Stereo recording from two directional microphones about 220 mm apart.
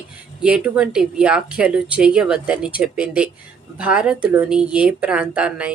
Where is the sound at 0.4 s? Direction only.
5° right (ahead or behind).